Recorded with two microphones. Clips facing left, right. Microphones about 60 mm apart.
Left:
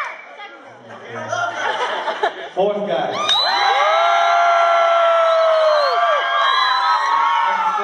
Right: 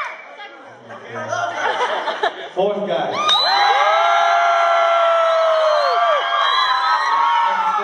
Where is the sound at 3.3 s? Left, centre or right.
Centre.